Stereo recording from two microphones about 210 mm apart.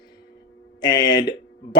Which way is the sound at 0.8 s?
20° left (ahead or behind).